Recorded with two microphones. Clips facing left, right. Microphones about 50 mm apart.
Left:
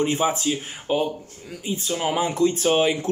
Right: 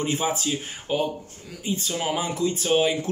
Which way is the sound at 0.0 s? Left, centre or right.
Centre.